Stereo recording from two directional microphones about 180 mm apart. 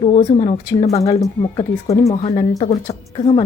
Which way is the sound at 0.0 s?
35° left (ahead or behind).